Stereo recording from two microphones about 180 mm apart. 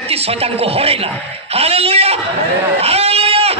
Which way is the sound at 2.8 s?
35° right (ahead or behind).